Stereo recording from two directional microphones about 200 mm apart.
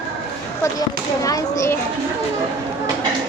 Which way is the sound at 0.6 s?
15° left (ahead or behind).